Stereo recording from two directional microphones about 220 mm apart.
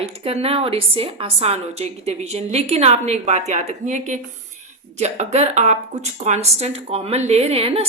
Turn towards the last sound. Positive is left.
turn(degrees=-25)  # may be behind; listen again after turning